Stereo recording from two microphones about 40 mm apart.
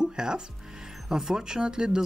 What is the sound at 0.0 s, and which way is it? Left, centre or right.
Music, centre.